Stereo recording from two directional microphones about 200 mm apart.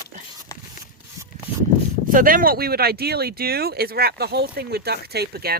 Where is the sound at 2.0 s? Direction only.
45° right (ahead or behind).